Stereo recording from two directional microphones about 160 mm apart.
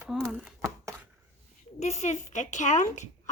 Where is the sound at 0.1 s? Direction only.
Centre (ahead or behind).